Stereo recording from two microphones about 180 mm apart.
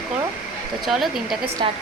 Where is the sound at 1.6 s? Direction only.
30° right (ahead or behind).